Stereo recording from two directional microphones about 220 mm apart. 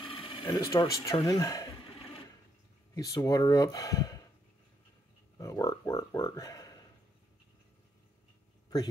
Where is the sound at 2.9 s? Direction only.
15° left (ahead or behind).